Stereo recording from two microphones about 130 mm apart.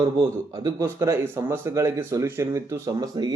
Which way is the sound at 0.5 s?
25° right (ahead or behind).